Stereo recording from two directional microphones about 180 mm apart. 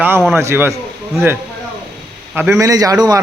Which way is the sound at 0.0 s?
10° right (ahead or behind).